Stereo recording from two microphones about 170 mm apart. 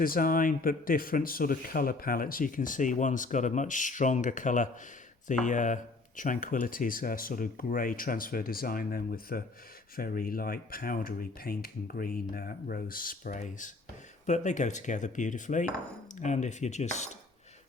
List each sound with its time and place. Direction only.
0.0 s speech: 55° left (ahead or behind)